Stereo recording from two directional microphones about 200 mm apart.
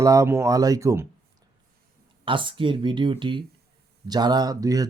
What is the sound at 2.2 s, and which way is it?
Speech, 25° right (ahead or behind).